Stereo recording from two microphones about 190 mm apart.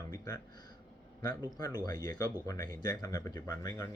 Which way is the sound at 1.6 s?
20° left (ahead or behind).